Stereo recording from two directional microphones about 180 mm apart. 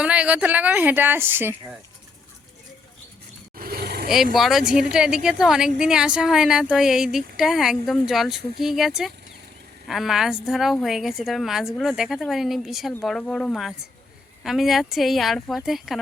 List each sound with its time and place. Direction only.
0.0 s a woman's voice: 5° right (ahead or behind)
3.6 s roaring cats: 60° right (ahead or behind)
4.1 s a woman's voice: centre (ahead or behind)